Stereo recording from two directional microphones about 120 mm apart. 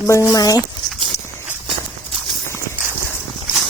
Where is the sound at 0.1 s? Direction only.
25° left (ahead or behind).